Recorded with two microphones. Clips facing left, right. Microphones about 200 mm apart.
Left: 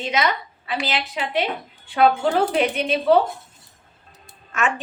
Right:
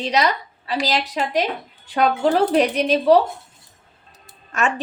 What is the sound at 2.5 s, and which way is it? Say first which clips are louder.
A woman's voice: right 4 dB; 40° right (ahead or behind).